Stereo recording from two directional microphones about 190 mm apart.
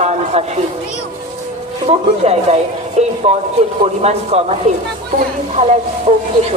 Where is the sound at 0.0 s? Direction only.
35° right (ahead or behind).